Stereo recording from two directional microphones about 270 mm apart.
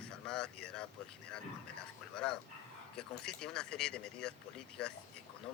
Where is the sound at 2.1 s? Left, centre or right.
Centre.